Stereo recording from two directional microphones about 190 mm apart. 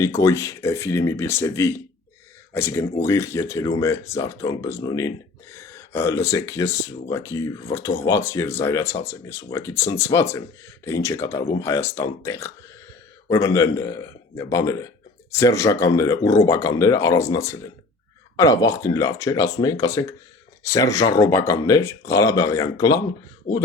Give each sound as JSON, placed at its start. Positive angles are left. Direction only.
{"t": 0.0, "sound": "speech", "side_deg": 15}